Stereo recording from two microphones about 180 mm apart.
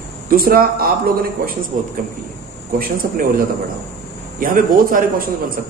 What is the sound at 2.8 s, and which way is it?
Speech, 55° right (ahead or behind).